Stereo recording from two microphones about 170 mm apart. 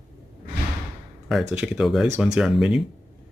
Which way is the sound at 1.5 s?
5° right (ahead or behind).